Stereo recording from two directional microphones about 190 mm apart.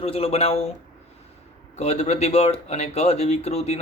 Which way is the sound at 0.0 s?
30° left (ahead or behind).